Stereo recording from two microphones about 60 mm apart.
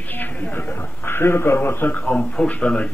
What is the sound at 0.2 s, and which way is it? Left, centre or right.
A man's voice, left.